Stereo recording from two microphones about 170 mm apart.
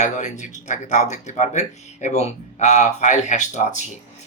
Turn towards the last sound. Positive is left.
turn(degrees=45)  # may be behind; listen again after turning